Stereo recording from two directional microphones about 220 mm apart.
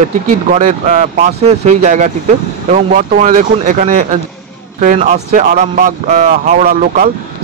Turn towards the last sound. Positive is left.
turn(degrees=-40)  # may be behind; listen again after turning